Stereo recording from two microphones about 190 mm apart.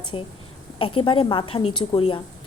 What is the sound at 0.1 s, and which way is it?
A woman's voice, 25° left (ahead or behind).